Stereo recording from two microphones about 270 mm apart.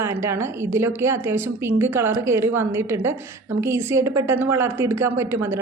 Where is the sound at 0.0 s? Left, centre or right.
Centre.